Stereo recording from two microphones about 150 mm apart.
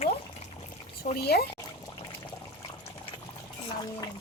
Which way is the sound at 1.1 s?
90° left.